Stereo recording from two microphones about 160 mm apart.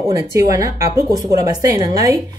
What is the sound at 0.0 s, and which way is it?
Speech, 20° right (ahead or behind).